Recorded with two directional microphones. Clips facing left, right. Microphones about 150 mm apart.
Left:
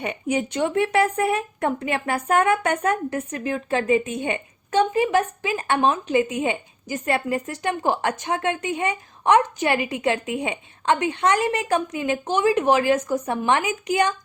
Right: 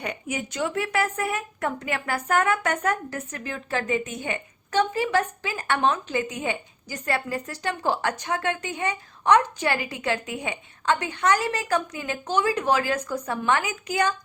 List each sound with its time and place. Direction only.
0.0 s a woman's voice: 25° left (ahead or behind)